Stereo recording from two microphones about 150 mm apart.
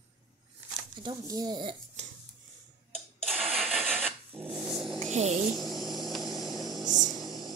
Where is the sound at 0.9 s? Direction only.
30° right (ahead or behind).